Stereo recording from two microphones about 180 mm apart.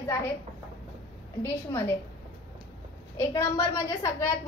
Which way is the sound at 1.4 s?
15° left (ahead or behind).